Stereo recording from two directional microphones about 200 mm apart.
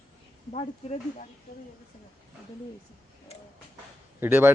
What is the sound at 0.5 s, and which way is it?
Speech, 35° left (ahead or behind).